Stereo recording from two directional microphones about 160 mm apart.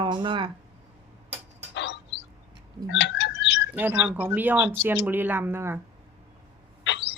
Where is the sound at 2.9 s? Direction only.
90° left.